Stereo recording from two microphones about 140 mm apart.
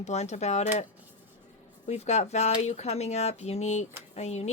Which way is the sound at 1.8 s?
50° left (ahead or behind).